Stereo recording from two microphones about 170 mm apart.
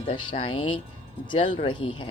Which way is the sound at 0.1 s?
35° left (ahead or behind).